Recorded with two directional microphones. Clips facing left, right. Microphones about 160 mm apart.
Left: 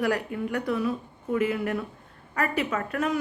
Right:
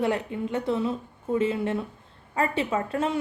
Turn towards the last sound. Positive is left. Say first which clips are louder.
# right 1 dB
turn(degrees=-25)  # may be behind; listen again after turning